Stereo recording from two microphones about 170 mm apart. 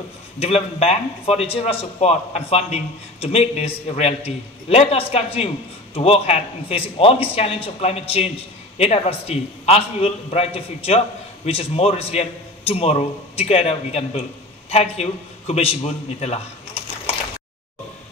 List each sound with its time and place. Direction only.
0.4 s a man's voice: 35° left (ahead or behind)